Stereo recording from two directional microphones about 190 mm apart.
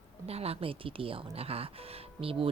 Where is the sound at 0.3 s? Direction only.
30° right (ahead or behind).